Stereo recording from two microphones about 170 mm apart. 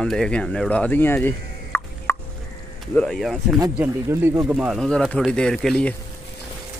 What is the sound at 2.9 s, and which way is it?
Speech, centre (ahead or behind).